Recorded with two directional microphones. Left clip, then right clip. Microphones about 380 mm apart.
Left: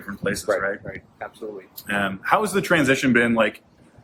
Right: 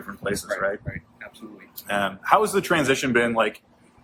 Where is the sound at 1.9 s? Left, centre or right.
Centre.